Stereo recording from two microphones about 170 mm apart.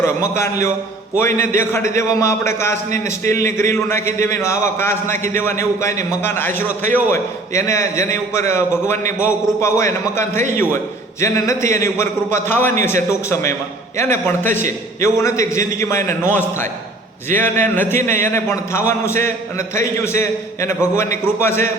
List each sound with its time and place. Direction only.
0.0 s a man's voice: 15° left (ahead or behind)
2.0 s a man's voice: 15° left (ahead or behind)